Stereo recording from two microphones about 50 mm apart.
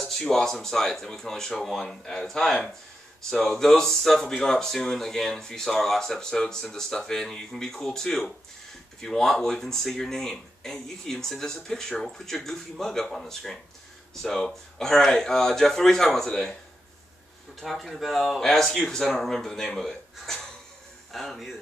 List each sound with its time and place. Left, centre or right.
0.0 s speech: centre
17.6 s speech: centre